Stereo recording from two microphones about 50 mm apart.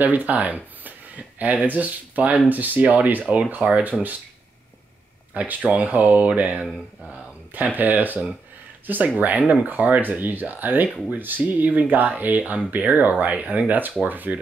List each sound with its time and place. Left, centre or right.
0.0 s speech: right
5.3 s speech: right